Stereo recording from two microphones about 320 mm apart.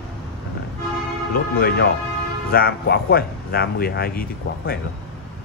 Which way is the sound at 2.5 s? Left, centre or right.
Left.